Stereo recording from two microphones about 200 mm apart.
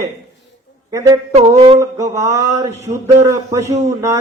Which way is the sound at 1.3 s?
30° right (ahead or behind).